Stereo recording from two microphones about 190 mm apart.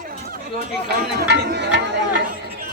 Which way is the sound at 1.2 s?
65° right (ahead or behind).